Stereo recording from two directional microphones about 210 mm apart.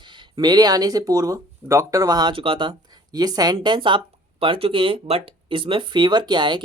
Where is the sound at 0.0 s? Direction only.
20° right (ahead or behind).